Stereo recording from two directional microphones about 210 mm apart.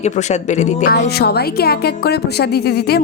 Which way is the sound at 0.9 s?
50° left (ahead or behind).